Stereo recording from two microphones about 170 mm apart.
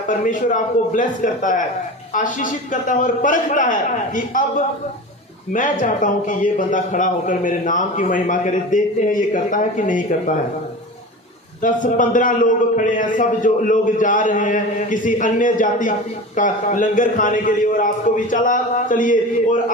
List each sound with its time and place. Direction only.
0.1 s a man's voice: 50° left (ahead or behind)
11.6 s a man's voice: 50° left (ahead or behind)